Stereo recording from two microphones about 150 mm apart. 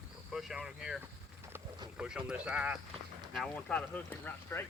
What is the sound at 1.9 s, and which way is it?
Speech, 5° right (ahead or behind).